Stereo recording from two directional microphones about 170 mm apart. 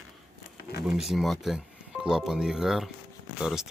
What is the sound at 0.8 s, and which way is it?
Speech, centre (ahead or behind).